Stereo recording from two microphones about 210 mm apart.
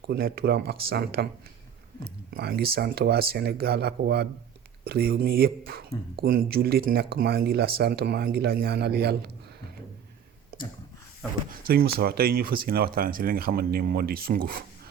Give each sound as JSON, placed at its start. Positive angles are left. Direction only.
{"t": 0.1, "sound": "speech", "side_deg": -45}
{"t": 2.3, "sound": "speech", "side_deg": -45}
{"t": 10.5, "sound": "a sound", "side_deg": -45}
{"t": 11.5, "sound": "speech", "side_deg": -45}